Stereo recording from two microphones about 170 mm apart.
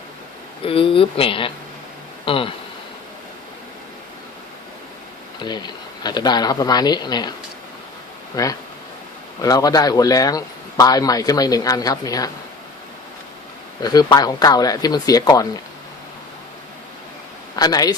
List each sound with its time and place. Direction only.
0.6 s speech: 30° left (ahead or behind)
5.4 s speech: 25° left (ahead or behind)
8.4 s speech: 20° left (ahead or behind)
13.8 s speech: 25° left (ahead or behind)
17.6 s speech: 20° left (ahead or behind)